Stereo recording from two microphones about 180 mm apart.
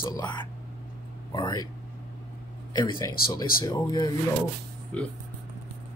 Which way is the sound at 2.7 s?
25° left (ahead or behind).